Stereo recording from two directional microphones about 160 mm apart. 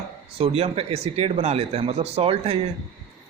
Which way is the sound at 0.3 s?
35° right (ahead or behind).